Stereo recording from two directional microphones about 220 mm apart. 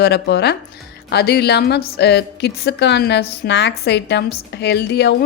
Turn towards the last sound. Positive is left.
turn(degrees=50)  # may be behind; listen again after turning